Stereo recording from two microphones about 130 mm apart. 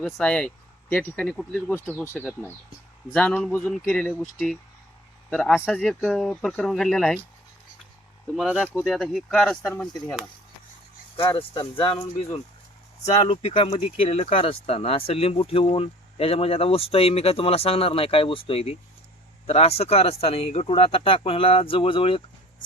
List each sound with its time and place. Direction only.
0.0 s speech: 5° left (ahead or behind)
1.3 s speech: centre (ahead or behind)
1.7 s speech: 20° left (ahead or behind)
3.1 s speech: 10° left (ahead or behind)
5.6 s speech: 5° right (ahead or behind)
9.0 s speech: centre (ahead or behind)
11.2 s speech: 40° left (ahead or behind)